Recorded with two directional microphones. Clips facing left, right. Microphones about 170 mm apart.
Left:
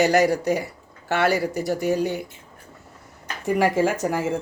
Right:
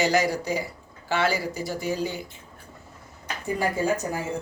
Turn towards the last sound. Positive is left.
turn(degrees=90)